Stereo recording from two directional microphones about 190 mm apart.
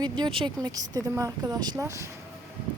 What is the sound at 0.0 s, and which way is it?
Speech, 25° right (ahead or behind).